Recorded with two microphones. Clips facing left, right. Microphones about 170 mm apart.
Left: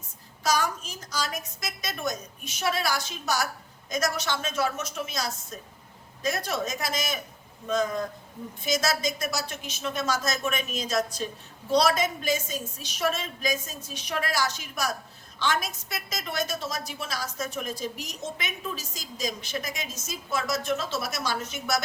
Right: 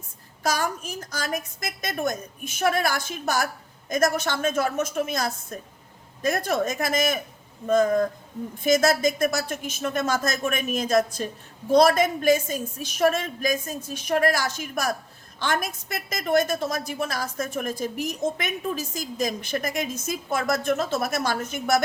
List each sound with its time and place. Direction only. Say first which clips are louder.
0.4 s a woman's voice: right 1 dB; 55° right (ahead or behind)